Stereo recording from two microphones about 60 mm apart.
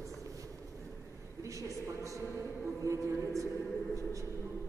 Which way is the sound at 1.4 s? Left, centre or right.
Right.